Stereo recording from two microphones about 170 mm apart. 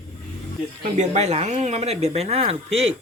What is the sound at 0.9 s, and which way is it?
Speech, 40° right (ahead or behind).